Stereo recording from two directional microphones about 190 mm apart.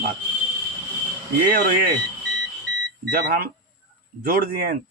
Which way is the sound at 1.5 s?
50° right (ahead or behind).